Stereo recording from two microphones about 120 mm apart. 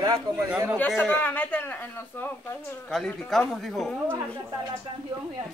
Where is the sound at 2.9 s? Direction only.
Centre (ahead or behind).